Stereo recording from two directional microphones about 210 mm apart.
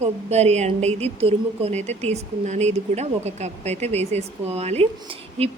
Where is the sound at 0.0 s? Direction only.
30° right (ahead or behind).